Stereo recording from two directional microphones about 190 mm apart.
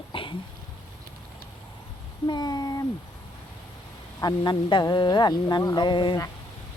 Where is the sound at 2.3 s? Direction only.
20° left (ahead or behind).